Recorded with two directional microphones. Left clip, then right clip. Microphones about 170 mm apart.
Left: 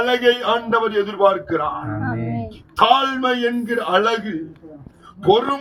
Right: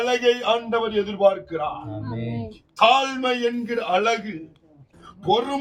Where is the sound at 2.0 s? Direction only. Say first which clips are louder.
Left 7 dB; 50° right (ahead or behind).